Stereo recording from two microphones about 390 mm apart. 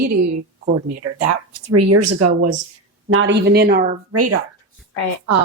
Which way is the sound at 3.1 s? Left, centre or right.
Right.